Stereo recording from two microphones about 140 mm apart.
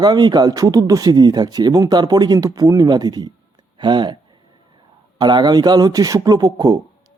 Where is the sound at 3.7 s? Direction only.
35° right (ahead or behind).